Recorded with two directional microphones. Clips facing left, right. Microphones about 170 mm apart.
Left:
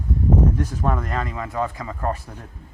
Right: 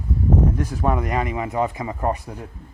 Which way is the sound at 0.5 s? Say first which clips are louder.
Right 2 dB; 10° right (ahead or behind).